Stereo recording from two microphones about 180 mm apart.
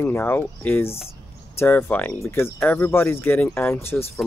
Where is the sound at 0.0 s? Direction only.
10° left (ahead or behind).